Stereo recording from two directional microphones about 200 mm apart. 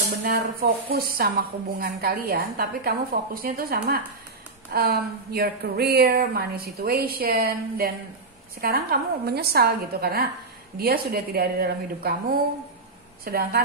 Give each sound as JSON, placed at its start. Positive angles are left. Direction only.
{"t": 0.1, "sound": "speech", "side_deg": -50}